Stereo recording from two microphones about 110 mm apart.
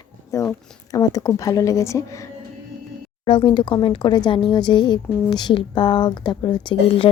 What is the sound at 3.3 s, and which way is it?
Speech, 50° left (ahead or behind).